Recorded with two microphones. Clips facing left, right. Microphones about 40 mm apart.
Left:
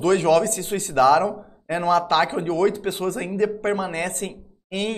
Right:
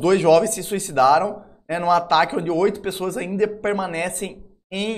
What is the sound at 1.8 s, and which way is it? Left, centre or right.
Speech, right.